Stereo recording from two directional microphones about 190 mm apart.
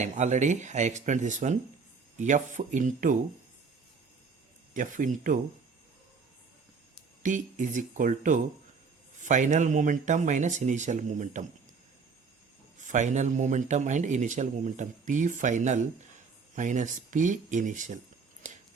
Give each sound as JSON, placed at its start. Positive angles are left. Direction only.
{"t": 0.0, "sound": "a man's voice", "side_deg": -40}
{"t": 4.7, "sound": "speech", "side_deg": -45}
{"t": 7.2, "sound": "a man's voice", "side_deg": -40}
{"t": 12.9, "sound": "a man's voice", "side_deg": -40}